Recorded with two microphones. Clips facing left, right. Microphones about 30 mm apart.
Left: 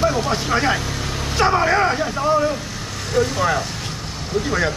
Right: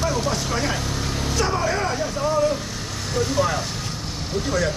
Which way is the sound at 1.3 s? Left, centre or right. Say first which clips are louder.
Left 7 dB; left.